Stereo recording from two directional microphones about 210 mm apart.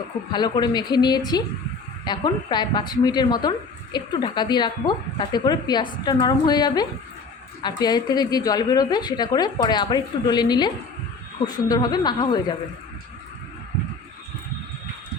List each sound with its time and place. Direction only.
0.3 s speech: 20° left (ahead or behind)